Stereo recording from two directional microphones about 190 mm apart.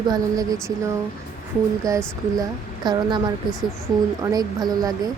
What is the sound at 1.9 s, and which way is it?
Speech, 15° right (ahead or behind).